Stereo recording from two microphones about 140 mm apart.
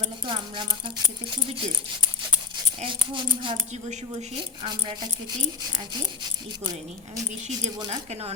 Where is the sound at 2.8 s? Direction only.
35° right (ahead or behind).